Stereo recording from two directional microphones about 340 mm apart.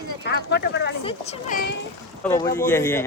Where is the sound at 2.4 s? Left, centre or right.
Centre.